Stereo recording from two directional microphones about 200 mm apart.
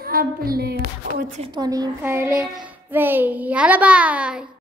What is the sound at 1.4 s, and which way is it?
A child's voice, 20° right (ahead or behind).